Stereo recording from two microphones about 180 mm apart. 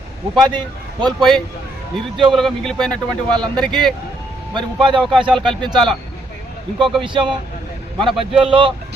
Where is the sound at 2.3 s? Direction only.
Centre (ahead or behind).